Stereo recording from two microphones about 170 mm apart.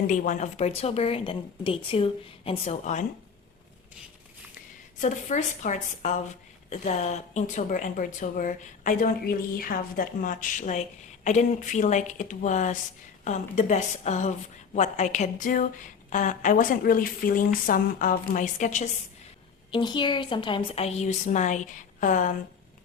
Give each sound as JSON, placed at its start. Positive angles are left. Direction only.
{"t": 0.1, "sound": "a woman's voice", "side_deg": 50}
{"t": 4.9, "sound": "speech", "side_deg": 45}
{"t": 19.7, "sound": "a woman's voice", "side_deg": 25}